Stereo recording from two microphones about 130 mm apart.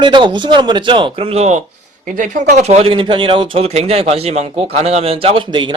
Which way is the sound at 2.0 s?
85° right.